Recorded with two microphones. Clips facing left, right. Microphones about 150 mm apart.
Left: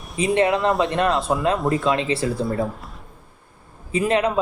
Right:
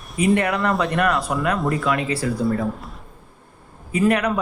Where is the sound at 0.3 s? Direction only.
25° left (ahead or behind).